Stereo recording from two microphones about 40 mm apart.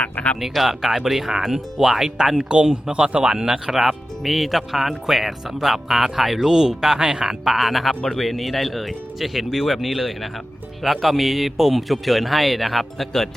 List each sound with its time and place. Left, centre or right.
0.3 s speech: centre
2.5 s speech: right
3.7 s speech: centre